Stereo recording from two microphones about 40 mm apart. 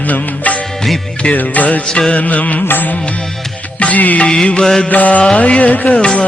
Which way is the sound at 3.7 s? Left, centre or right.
Left.